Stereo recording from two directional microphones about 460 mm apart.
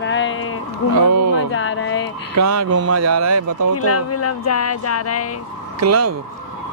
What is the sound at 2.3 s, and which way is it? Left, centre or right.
Speech, right.